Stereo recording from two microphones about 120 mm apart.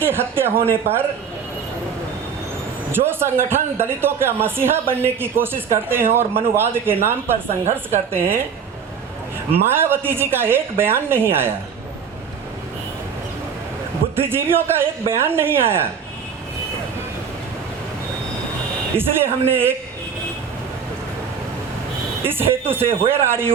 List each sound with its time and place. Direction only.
0.0 s a man's voice: 20° right (ahead or behind)
2.9 s a man's voice: 20° right (ahead or behind)
9.5 s a man's voice: 20° right (ahead or behind)
14.2 s a man's voice: 20° right (ahead or behind)
18.9 s a man's voice: 20° right (ahead or behind)
22.7 s a man's voice: 20° right (ahead or behind)